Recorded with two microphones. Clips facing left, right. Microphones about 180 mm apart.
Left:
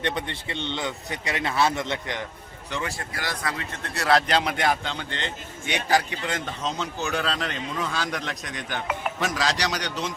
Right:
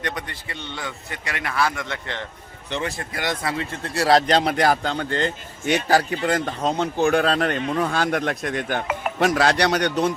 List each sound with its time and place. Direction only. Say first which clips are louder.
0.0 s a man's voice: left 2 dB; 25° left (ahead or behind)
2.6 s a man's voice: right 4 dB; 25° right (ahead or behind); by 9.9 s 60° right (ahead or behind)